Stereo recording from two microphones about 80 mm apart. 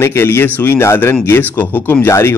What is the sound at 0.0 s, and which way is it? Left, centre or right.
A man's voice, left.